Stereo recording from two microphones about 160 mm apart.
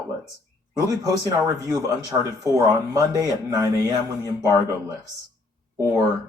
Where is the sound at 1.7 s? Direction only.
20° right (ahead or behind).